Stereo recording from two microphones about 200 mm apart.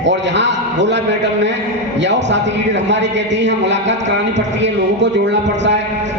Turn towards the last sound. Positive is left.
turn(degrees=-60)  # may be behind; listen again after turning